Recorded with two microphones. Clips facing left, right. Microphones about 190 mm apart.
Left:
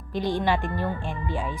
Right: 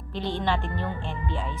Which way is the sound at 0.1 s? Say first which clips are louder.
Left 3 dB; 10° left (ahead or behind).